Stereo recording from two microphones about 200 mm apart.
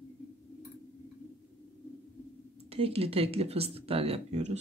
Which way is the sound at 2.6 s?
30° right (ahead or behind).